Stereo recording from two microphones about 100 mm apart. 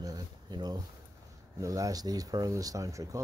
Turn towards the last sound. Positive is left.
turn(degrees=-35)  # may be behind; listen again after turning